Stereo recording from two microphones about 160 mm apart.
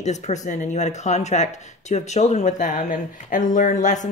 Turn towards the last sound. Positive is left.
turn(degrees=50)  # may be behind; listen again after turning